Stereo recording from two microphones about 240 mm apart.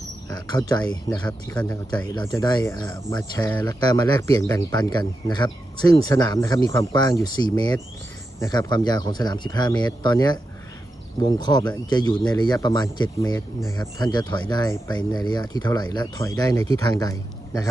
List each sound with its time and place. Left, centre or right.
0.3 s speech: centre